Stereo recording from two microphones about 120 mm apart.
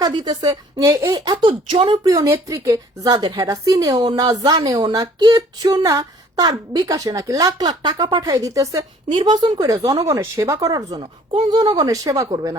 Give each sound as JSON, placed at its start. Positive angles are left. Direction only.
{"t": 0.0, "sound": "a woman's voice", "side_deg": -40}
{"t": 1.3, "sound": "speech", "side_deg": -40}
{"t": 2.0, "sound": "a woman's voice", "side_deg": -25}
{"t": 9.1, "sound": "a woman's voice", "side_deg": -40}